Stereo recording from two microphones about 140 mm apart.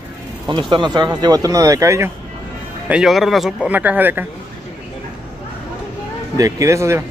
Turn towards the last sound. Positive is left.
turn(degrees=-20)  # may be behind; listen again after turning